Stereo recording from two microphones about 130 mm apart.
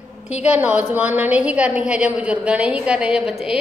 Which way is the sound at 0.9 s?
15° right (ahead or behind).